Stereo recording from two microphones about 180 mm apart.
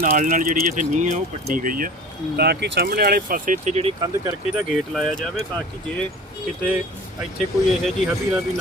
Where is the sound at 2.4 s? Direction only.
65° right (ahead or behind); by 3.9 s 35° right (ahead or behind).